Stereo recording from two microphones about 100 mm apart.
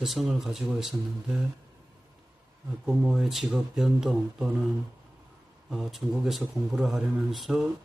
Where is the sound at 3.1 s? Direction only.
Centre (ahead or behind).